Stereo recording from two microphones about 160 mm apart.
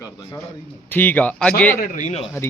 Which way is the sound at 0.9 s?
10° left (ahead or behind).